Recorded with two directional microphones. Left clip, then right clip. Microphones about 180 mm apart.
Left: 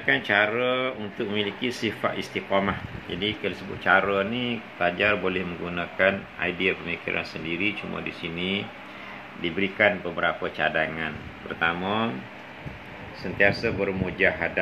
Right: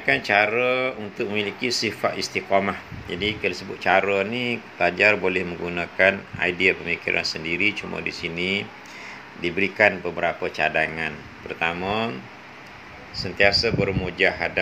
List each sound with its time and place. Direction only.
0.0 s speech: 25° right (ahead or behind)
2.0 s speech: 20° right (ahead or behind)
13.2 s speech: 25° right (ahead or behind)